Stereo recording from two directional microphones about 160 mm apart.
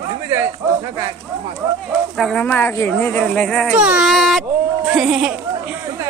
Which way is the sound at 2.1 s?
5° left (ahead or behind).